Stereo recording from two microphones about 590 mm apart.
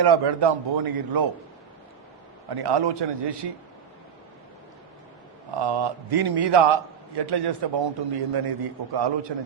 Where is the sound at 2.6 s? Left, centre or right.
Right.